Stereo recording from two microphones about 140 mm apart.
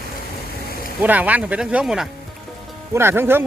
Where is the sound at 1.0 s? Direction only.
10° right (ahead or behind).